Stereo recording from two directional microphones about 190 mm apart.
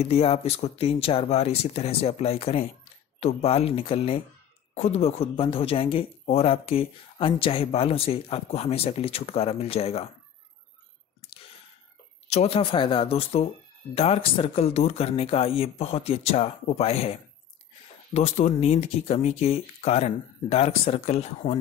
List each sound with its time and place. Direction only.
0.0 s speech: 30° left (ahead or behind)
11.1 s a sound: 30° left (ahead or behind)
12.3 s speech: 35° left (ahead or behind)